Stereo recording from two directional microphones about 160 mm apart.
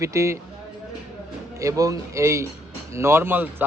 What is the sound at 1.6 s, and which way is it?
A man's voice, 20° right (ahead or behind).